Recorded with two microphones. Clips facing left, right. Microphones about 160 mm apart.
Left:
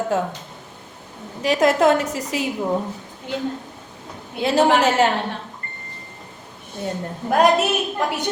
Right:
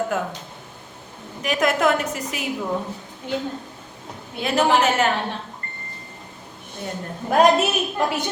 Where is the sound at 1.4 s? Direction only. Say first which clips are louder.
Left 4 dB; 30° left (ahead or behind).